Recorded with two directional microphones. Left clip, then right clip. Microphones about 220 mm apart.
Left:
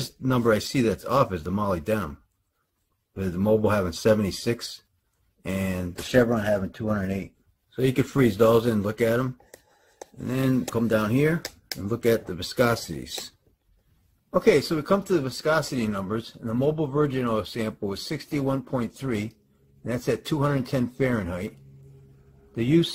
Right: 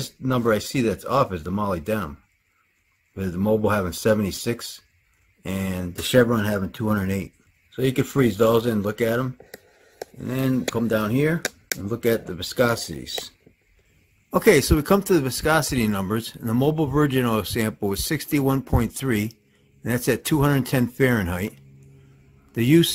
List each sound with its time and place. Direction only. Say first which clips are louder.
0.0 s speech: right 1 dB; centre (ahead or behind)
3.2 s speech: even; 5° right (ahead or behind)
6.3 s speech: even; 25° right (ahead or behind)
7.7 s speech: right 2 dB; 5° right (ahead or behind)
14.3 s a man's voice: right 3 dB; 30° right (ahead or behind)